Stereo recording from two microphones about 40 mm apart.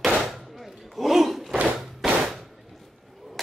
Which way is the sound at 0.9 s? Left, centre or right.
Centre.